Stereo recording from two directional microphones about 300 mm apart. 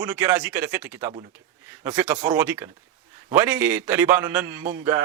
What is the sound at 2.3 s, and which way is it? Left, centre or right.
Speech, centre.